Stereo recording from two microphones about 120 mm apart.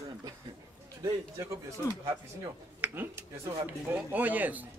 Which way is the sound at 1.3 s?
25° right (ahead or behind).